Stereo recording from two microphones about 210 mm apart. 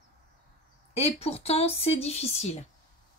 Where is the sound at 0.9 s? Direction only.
30° left (ahead or behind).